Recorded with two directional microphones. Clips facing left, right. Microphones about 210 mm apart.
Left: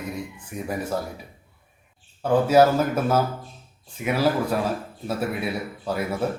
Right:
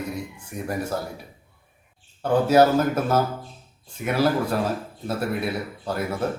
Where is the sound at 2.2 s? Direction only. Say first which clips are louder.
Even; 5° left (ahead or behind).